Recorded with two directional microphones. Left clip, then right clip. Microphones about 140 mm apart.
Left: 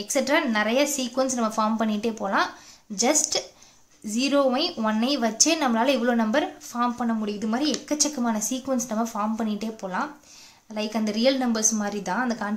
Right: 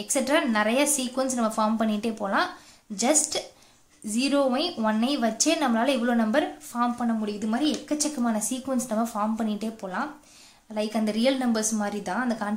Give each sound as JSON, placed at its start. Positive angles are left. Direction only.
{"t": 0.1, "sound": "a woman's voice", "side_deg": 15}